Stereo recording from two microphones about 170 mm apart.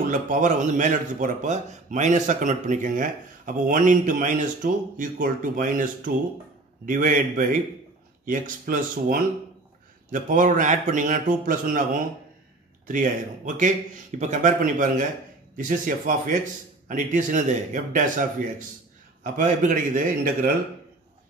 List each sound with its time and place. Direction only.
0.1 s a man's voice: 50° right (ahead or behind)